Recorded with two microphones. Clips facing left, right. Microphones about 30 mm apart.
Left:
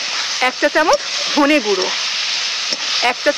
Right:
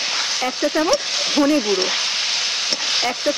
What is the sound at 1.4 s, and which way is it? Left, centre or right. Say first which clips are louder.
Speech: left 3 dB; centre.